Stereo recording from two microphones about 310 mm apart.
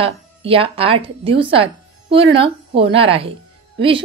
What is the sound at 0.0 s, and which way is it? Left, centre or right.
A woman's voice, centre.